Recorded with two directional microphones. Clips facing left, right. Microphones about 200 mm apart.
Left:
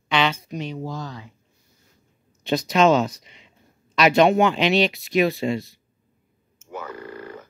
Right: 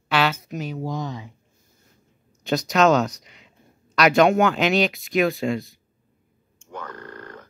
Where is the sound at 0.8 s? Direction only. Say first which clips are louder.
Right 3 dB; 20° right (ahead or behind).